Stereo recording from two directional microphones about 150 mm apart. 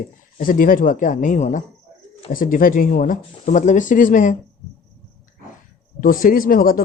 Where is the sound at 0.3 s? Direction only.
65° left (ahead or behind).